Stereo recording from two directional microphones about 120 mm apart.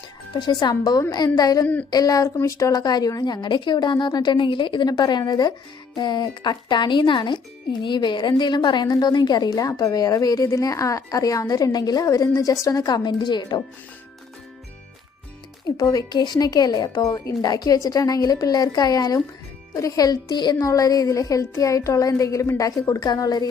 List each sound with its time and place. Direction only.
0.6 s speech: 35° left (ahead or behind)
15.6 s speech: 30° left (ahead or behind)